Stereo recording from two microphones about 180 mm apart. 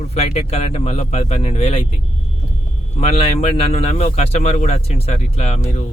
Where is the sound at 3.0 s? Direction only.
35° left (ahead or behind).